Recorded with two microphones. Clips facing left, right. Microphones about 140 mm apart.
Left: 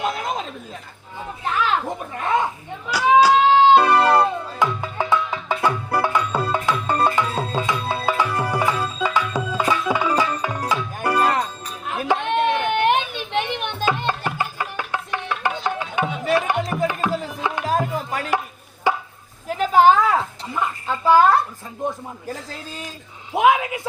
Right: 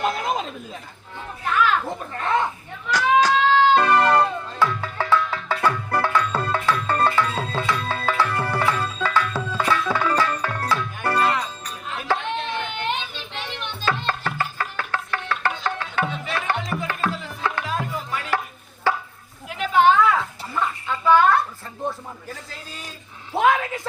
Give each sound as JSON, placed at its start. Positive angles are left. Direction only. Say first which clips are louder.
{"t": 0.0, "sound": "chuckle", "louder": "right 1 dB", "side_deg": 0}
{"t": 1.5, "sound": "a sound", "louder": "right 1 dB", "side_deg": 30}
{"t": 1.8, "sound": "speech", "louder": "left 1 dB", "side_deg": 15}
{"t": 2.9, "sound": "music", "louder": "left 4 dB", "side_deg": 10}
{"t": 11.9, "sound": "chopping", "louder": "left 5 dB", "side_deg": 55}
{"t": 12.2, "sound": "children playing", "louder": "left 7 dB", "side_deg": 60}
{"t": 14.1, "sound": "music", "louder": "left 2 dB", "side_deg": 15}
{"t": 17.6, "sound": "music", "louder": "left 9 dB", "side_deg": 40}
{"t": 18.9, "sound": "chopping", "louder": "left 2 dB", "side_deg": 15}
{"t": 19.5, "sound": "a sound", "louder": "left 3 dB", "side_deg": 40}
{"t": 21.8, "sound": "a sound", "louder": "left 2 dB", "side_deg": 15}
{"t": 23.3, "sound": "a sound", "louder": "left 2 dB", "side_deg": 10}